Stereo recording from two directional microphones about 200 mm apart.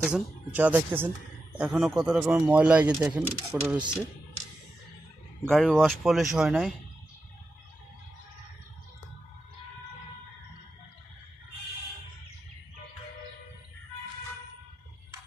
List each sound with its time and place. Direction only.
0.0 s speech: 5° right (ahead or behind)
3.7 s speech: 20° right (ahead or behind)
5.5 s speech: centre (ahead or behind)